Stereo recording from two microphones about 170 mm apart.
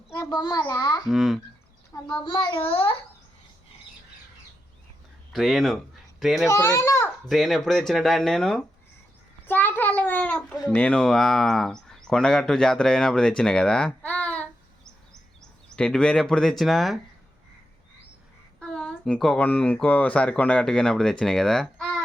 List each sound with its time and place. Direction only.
0.1 s a child's voice: 15° left (ahead or behind)
1.0 s a child's voice: centre (ahead or behind)
2.2 s a child's voice: 25° left (ahead or behind)
5.3 s a child's voice: centre (ahead or behind)
6.5 s a child's voice: 15° left (ahead or behind)
7.3 s a child's voice: centre (ahead or behind)
18.6 s speech: 5° left (ahead or behind)